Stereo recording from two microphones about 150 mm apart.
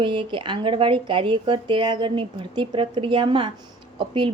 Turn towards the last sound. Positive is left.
turn(degrees=-35)  # may be behind; listen again after turning